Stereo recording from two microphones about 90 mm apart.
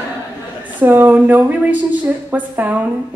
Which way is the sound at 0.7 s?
20° right (ahead or behind).